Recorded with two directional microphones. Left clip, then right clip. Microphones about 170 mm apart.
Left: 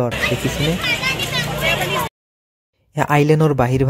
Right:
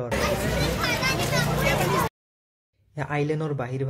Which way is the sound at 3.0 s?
55° left (ahead or behind).